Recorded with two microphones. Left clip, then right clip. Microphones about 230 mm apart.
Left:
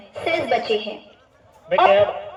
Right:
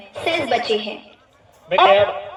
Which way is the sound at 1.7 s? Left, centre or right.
Right.